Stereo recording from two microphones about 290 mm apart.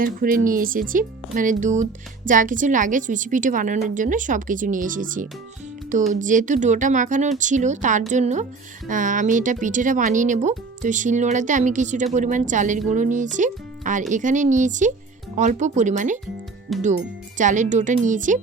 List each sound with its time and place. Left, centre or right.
0.0 s speech: right
16.7 s speech: centre
17.3 s speech: right